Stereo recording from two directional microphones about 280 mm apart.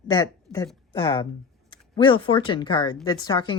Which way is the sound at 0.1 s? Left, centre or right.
Centre.